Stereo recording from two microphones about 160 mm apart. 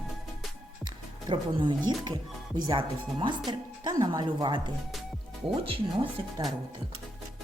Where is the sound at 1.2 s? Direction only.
30° right (ahead or behind).